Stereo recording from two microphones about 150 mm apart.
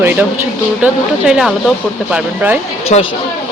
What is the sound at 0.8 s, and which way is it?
Speech, 5° right (ahead or behind).